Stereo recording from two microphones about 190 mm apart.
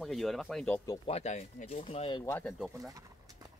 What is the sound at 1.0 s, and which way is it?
Speech, 35° left (ahead or behind).